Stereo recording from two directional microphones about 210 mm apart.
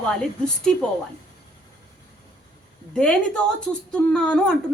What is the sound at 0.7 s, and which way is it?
Speech, 5° left (ahead or behind).